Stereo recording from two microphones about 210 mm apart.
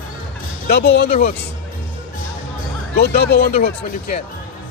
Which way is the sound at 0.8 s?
55° left (ahead or behind).